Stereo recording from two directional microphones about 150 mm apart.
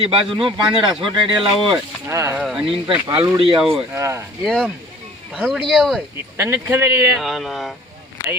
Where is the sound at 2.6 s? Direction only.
30° right (ahead or behind).